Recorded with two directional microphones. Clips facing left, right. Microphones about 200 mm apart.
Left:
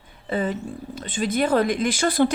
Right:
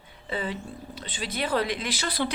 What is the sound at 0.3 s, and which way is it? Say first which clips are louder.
A woman's voice: left 7 dB; 50° left (ahead or behind).